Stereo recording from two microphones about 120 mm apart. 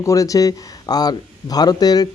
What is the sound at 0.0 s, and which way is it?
A man's voice, 30° left (ahead or behind).